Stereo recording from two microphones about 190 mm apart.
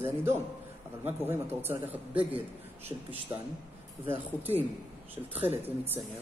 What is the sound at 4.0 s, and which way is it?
Speech, 10° right (ahead or behind).